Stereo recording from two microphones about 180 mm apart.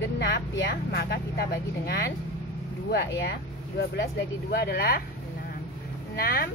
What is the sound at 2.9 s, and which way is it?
Speech, 65° left (ahead or behind).